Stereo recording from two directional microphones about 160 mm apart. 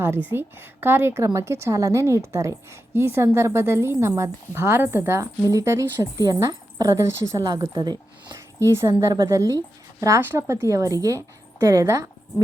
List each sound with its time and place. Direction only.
0.3 s a woman's voice: 10° right (ahead or behind)